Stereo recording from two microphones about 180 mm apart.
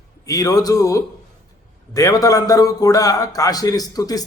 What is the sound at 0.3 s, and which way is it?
A man's voice, 20° left (ahead or behind).